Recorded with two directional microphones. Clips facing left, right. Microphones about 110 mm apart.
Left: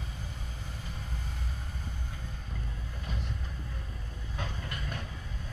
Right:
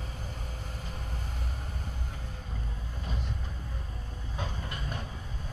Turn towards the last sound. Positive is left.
turn(degrees=-25)  # may be behind; listen again after turning